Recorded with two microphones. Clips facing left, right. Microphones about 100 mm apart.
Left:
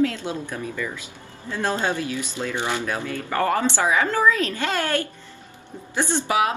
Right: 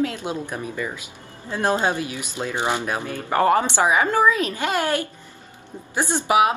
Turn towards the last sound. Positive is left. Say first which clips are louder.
# right 3 dB
turn(degrees=-20)  # may be behind; listen again after turning